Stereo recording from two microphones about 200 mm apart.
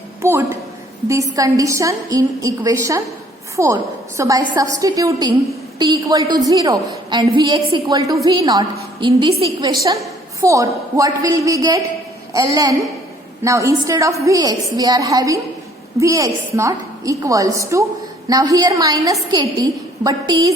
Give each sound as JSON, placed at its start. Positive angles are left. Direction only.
{"t": 0.2, "sound": "a woman's voice", "side_deg": -15}